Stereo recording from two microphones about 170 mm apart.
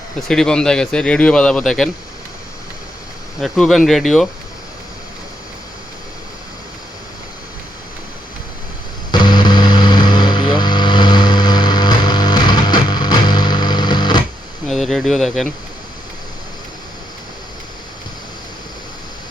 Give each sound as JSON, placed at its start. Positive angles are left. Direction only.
{"t": 0.3, "sound": "speech", "side_deg": 5}
{"t": 3.4, "sound": "speech", "side_deg": 0}
{"t": 9.1, "sound": "vehicle", "side_deg": 25}
{"t": 14.7, "sound": "a sound", "side_deg": 0}